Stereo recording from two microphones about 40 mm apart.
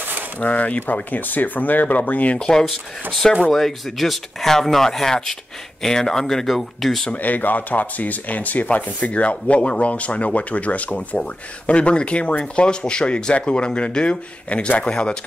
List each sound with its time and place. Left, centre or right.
0.4 s speech: left
2.3 s speech: centre
3.5 s speech: centre
7.2 s speech: left